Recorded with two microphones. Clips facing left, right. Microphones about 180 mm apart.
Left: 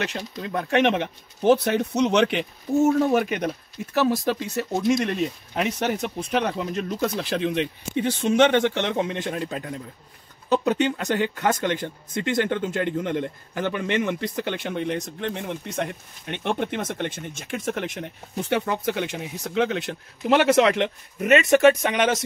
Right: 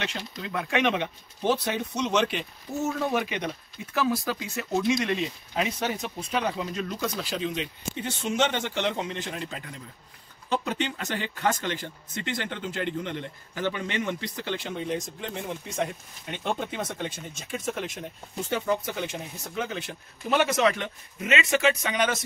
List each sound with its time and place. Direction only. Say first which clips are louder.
0.0 s speech: left 5 dB; 40° left (ahead or behind)
1.5 s speech: left 8 dB; 55° left (ahead or behind)
4.0 s speech: left 5 dB; 35° left (ahead or behind)
5.6 s speech: left 4 dB; 60° left (ahead or behind)
18.5 s speech: left 3 dB; 75° left (ahead or behind)
21.4 s speech: left 8 dB; 45° left (ahead or behind)